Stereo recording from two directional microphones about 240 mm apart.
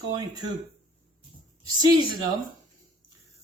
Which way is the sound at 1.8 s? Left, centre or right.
Centre.